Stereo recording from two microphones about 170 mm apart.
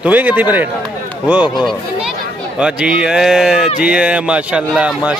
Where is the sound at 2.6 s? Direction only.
5° right (ahead or behind).